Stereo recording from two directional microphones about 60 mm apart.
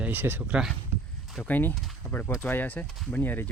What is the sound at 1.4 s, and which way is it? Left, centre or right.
Speech, left.